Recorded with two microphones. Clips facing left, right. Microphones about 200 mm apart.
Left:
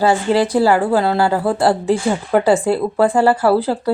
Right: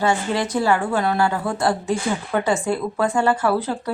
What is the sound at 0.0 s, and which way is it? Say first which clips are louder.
A woman's voice: left 6 dB; 35° left (ahead or behind).